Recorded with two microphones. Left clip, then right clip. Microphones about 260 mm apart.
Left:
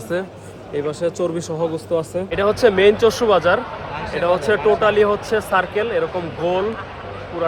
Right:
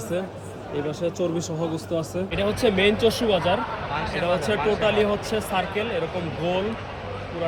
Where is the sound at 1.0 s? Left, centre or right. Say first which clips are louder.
Left 3 dB; centre.